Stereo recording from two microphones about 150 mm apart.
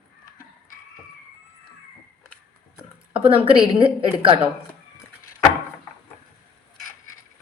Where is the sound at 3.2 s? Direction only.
35° right (ahead or behind).